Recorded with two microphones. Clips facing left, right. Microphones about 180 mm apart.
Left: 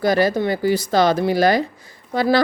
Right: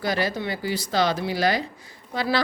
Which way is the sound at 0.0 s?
45° left (ahead or behind).